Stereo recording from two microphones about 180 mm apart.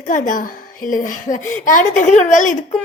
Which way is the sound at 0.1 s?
45° left (ahead or behind).